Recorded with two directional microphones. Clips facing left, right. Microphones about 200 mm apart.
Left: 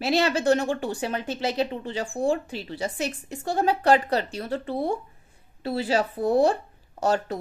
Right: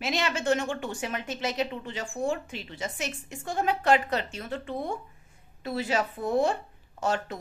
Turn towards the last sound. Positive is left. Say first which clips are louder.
# left 5 dB
turn(degrees=35)  # may be behind; listen again after turning